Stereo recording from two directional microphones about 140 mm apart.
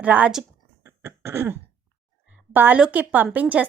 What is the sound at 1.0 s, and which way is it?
Throat clearing, 15° right (ahead or behind).